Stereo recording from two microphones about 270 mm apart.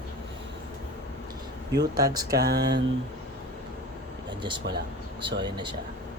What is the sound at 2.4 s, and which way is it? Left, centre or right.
Speech, right.